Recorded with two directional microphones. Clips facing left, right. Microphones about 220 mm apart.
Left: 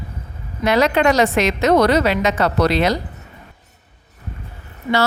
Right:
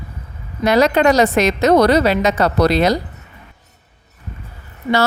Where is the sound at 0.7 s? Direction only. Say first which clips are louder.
Right 2 dB; 40° right (ahead or behind).